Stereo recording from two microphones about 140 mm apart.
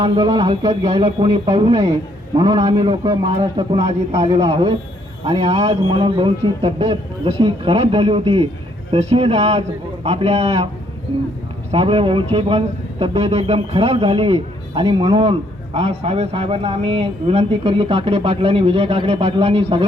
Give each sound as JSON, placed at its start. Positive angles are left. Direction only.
{"t": 0.0, "sound": "speech", "side_deg": -40}
{"t": 11.7, "sound": "speech", "side_deg": -45}